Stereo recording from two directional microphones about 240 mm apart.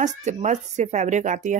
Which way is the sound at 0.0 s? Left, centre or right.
Right.